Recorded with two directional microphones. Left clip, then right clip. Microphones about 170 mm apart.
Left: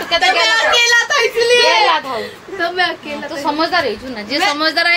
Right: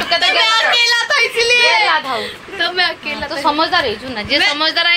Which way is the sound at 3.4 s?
10° right (ahead or behind).